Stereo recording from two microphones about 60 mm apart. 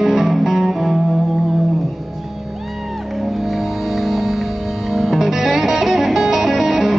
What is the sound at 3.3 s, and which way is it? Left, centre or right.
Music, centre.